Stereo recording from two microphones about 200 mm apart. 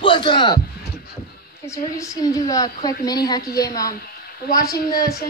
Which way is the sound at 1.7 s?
15° left (ahead or behind).